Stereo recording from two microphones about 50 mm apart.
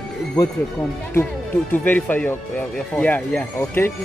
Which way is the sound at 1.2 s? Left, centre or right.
Left.